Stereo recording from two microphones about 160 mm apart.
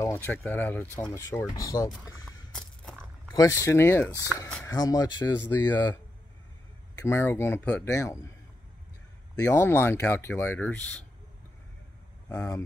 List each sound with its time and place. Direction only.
0.0 s a sound: 15° left (ahead or behind)
0.4 s speech: 10° left (ahead or behind)
2.5 s a sound: 5° left (ahead or behind)
3.3 s speech: 20° left (ahead or behind)
7.0 s speech: 15° left (ahead or behind)
9.4 s speech: 15° left (ahead or behind)